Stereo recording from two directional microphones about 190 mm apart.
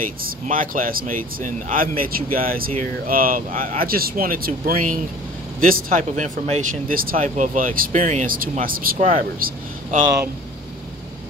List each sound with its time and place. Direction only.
0.0 s speech: 45° right (ahead or behind)